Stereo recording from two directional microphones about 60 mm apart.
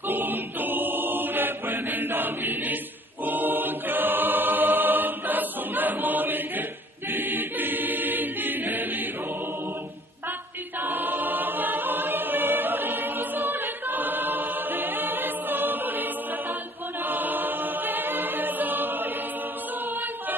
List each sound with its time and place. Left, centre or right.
0.1 s choir: right
10.8 s choir: right